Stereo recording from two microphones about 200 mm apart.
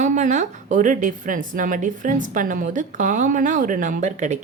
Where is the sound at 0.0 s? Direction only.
35° right (ahead or behind).